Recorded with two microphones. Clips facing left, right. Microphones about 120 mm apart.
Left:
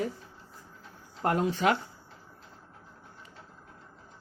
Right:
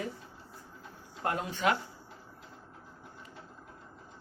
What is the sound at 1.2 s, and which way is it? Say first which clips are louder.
Speech: left 4 dB; 35° left (ahead or behind).